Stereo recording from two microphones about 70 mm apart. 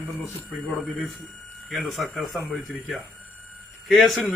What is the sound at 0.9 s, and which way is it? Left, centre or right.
Speech, centre.